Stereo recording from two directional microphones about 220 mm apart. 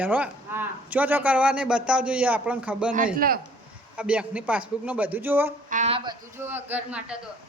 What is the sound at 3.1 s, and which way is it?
Speech, 40° right (ahead or behind).